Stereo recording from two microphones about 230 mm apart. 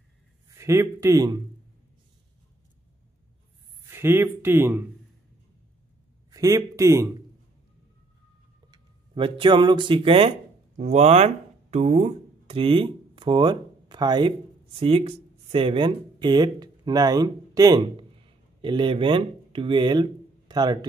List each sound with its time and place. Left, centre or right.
0.6 s speech: centre
3.8 s speech: centre
6.3 s a man's voice: centre
8.6 s speech: centre